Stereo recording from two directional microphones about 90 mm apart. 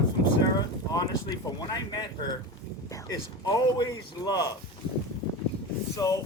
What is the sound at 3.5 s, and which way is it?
Speech, 45° left (ahead or behind).